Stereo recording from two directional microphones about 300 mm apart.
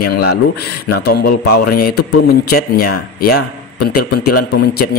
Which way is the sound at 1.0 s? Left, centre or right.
Left.